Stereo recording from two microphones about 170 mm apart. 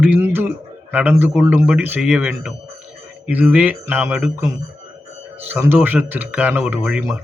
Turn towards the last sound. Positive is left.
turn(degrees=-10)  # may be behind; listen again after turning